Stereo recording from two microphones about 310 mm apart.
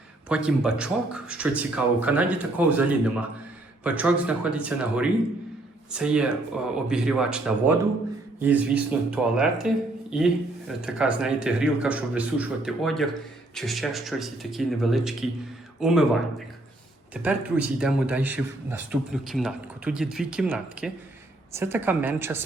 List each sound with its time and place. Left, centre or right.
0.3 s speech: centre
17.2 s a woman's voice: centre